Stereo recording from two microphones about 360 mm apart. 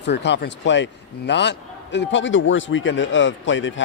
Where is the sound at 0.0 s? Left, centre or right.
Left.